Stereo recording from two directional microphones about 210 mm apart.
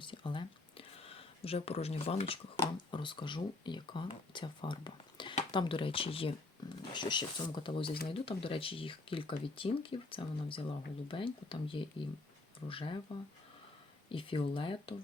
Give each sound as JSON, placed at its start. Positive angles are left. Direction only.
{"t": 0.0, "sound": "a sound", "side_deg": 25}
{"t": 2.9, "sound": "speech", "side_deg": 25}
{"t": 14.1, "sound": "speech", "side_deg": 25}